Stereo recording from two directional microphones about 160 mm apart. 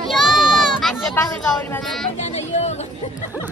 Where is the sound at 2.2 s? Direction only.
45° left (ahead or behind).